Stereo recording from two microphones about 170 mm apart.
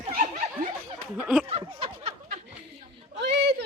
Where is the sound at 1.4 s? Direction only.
35° right (ahead or behind).